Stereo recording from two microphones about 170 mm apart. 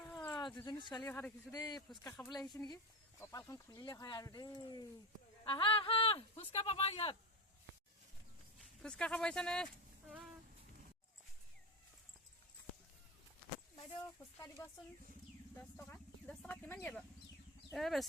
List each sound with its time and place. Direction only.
0.1 s a sound: 10° left (ahead or behind)
0.3 s speech: 25° left (ahead or behind)
1.0 s speech: 15° left (ahead or behind)
2.0 s speech: 10° left (ahead or behind); by 7.2 s 35° left (ahead or behind)
8.8 s speech: 5° left (ahead or behind)
15.5 s speech: 10° left (ahead or behind)
17.7 s speech: centre (ahead or behind)